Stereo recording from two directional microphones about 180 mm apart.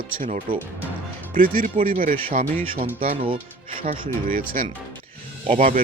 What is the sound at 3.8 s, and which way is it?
Speech, 50° right (ahead or behind).